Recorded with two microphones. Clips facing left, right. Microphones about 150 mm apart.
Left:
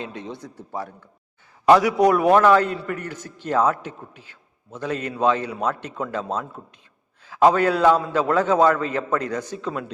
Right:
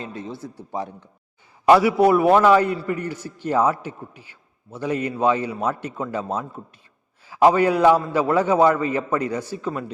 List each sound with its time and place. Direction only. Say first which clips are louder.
0.0 s a man's voice: right 1 dB; 5° right (ahead or behind)
0.7 s speech: right 2 dB; 20° right (ahead or behind)
1.6 s a man's voice: right 1 dB; 10° right (ahead or behind)